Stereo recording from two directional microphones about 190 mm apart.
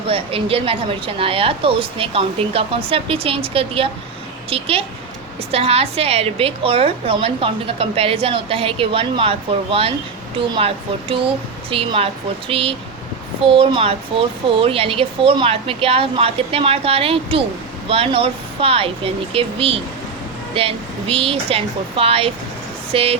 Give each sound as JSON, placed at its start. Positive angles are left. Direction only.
{"t": 0.1, "sound": "a woman's voice", "side_deg": -30}
{"t": 11.7, "sound": "a woman's voice", "side_deg": -30}